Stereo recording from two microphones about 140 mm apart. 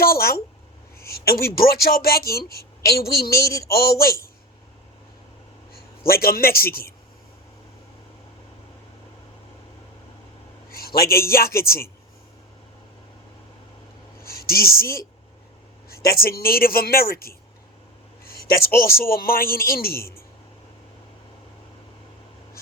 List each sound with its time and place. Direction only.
0.0 s a sound: 90° left
0.9 s a woman's voice: 90° left
6.1 s a man's voice: 90° left
10.7 s a sound: 90° left
11.3 s a man's voice: 90° left
14.2 s a man's voice: 90° left